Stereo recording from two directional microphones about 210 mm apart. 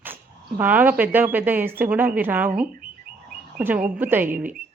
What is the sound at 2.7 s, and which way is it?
Bird, 45° right (ahead or behind).